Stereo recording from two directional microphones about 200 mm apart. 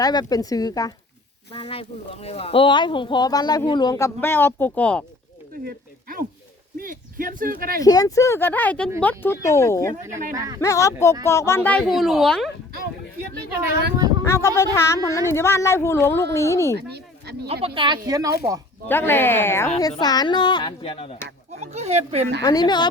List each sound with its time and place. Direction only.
0.0 s speech: 20° left (ahead or behind)
5.6 s speech: 50° right (ahead or behind)
7.8 s a woman's voice: 20° left (ahead or behind)
10.1 s speech: 40° right (ahead or behind)
10.3 s speech: 15° right (ahead or behind)
10.6 s a woman's voice: 15° left (ahead or behind)
14.3 s a woman's voice: 15° left (ahead or behind)
16.7 s speech: 55° right (ahead or behind)
17.7 s speech: 25° right (ahead or behind)
18.9 s a woman's voice: 10° left (ahead or behind); by 21.2 s 30° left (ahead or behind)
21.5 s speech: 35° right (ahead or behind)
22.4 s speech: 20° left (ahead or behind)